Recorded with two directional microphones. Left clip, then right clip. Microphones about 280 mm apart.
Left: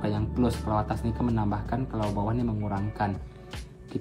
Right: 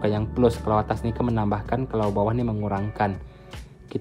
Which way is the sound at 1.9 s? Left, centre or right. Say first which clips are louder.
Right 8 dB; left.